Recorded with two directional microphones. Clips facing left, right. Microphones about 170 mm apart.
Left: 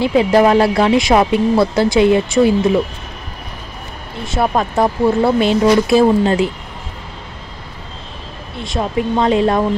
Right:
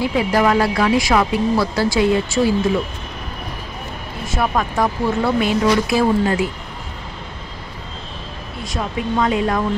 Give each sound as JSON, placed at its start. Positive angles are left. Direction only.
{"t": 0.0, "sound": "speech", "side_deg": 25}
{"t": 4.3, "sound": "speech", "side_deg": 25}
{"t": 8.6, "sound": "speech", "side_deg": 25}